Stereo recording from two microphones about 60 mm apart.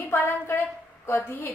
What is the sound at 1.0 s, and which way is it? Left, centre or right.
Speech, left.